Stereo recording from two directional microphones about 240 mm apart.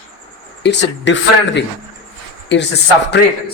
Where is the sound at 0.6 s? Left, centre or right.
Left.